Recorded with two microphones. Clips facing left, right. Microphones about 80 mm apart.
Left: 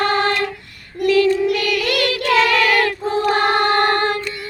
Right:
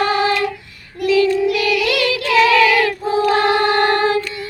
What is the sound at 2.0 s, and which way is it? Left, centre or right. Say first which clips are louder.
Child singing: right 1 dB; left.